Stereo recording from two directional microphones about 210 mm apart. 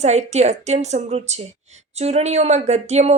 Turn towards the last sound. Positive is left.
turn(degrees=-30)  # may be behind; listen again after turning